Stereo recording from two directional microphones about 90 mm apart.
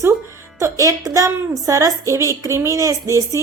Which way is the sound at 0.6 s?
35° right (ahead or behind).